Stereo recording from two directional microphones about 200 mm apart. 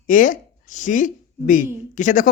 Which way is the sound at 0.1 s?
40° left (ahead or behind).